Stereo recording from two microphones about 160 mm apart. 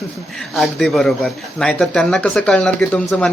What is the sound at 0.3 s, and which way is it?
Speech, centre (ahead or behind).